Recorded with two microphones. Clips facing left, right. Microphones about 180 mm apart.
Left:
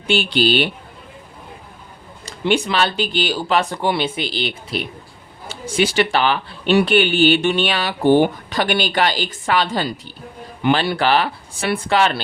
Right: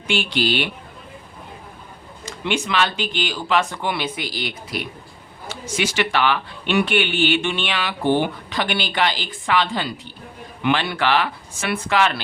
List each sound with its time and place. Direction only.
0.1 s speech: 30° left (ahead or behind)
2.2 s speech: 35° left (ahead or behind)